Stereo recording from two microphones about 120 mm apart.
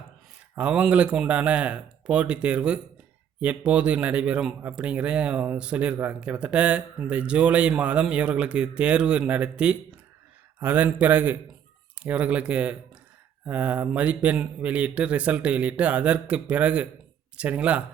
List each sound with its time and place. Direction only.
0.5 s speech: 10° right (ahead or behind)